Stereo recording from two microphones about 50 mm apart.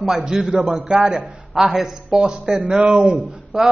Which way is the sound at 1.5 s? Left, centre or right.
Centre.